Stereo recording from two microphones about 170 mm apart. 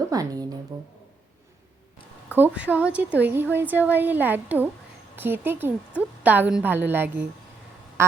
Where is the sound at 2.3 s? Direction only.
10° right (ahead or behind).